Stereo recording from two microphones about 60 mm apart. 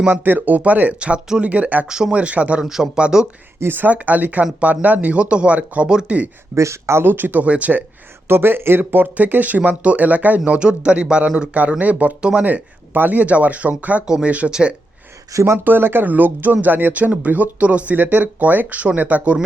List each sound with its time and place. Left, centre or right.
0.1 s speech: right
1.9 s speech: centre
2.6 s a man's voice: centre
3.6 s speech: right; by 6.2 s centre
6.5 s speech: right
8.3 s a man's voice: right; by 14.8 s centre
15.3 s speech: right
15.5 s speech: right